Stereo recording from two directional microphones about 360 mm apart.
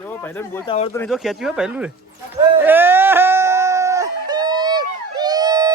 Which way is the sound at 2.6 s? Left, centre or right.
Centre.